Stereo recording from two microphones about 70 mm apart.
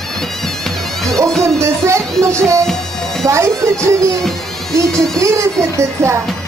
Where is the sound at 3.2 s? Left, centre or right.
Right.